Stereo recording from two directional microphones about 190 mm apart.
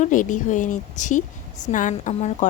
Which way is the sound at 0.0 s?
45° left (ahead or behind).